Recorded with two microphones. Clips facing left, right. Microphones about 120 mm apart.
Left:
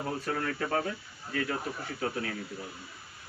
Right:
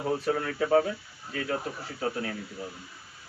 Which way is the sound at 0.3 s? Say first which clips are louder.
Right 5 dB; 15° right (ahead or behind).